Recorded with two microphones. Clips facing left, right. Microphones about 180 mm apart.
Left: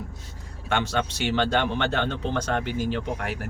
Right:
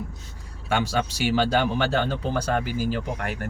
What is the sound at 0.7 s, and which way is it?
Speech, 5° right (ahead or behind).